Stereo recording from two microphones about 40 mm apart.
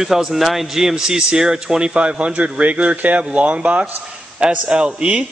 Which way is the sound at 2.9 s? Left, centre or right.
Right.